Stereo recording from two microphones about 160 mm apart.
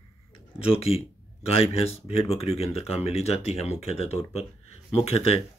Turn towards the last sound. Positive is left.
turn(degrees=40)  # may be behind; listen again after turning